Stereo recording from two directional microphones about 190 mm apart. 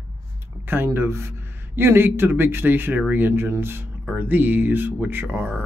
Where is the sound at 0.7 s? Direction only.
10° right (ahead or behind).